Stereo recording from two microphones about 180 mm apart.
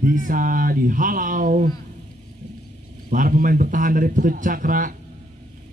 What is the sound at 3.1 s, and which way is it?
A man's voice, 50° right (ahead or behind).